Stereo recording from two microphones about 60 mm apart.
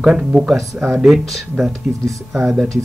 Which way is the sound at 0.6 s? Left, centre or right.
Right.